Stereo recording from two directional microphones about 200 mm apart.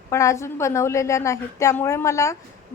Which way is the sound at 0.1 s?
15° left (ahead or behind).